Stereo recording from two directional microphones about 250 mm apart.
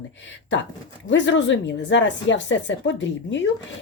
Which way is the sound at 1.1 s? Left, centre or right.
Left.